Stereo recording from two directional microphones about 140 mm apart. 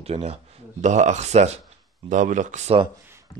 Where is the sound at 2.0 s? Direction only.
65° right (ahead or behind).